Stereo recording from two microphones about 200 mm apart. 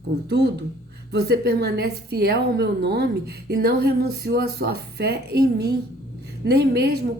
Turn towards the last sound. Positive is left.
turn(degrees=-55)  # may be behind; listen again after turning